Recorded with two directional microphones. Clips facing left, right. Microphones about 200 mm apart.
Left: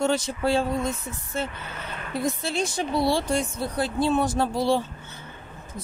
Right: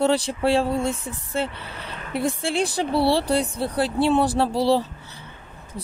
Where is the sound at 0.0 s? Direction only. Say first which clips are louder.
Right 3 dB; 35° right (ahead or behind).